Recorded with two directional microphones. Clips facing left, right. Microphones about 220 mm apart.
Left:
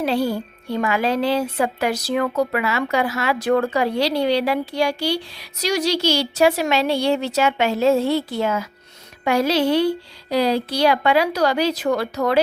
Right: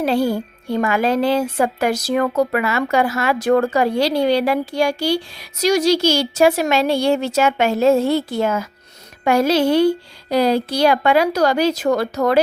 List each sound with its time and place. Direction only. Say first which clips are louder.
0.0 s a woman's voice: right 3 dB; 45° right (ahead or behind)